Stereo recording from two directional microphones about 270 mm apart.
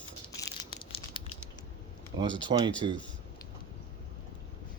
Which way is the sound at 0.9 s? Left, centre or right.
Left.